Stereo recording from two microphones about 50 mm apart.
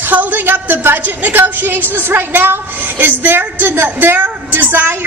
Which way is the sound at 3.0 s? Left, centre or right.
Right.